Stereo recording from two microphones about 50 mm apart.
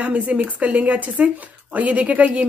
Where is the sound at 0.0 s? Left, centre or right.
Right.